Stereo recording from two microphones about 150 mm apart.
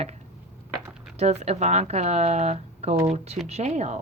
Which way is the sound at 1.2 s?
45° right (ahead or behind).